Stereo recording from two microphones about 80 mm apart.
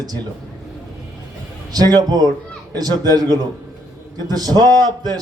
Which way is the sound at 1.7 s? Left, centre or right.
Right.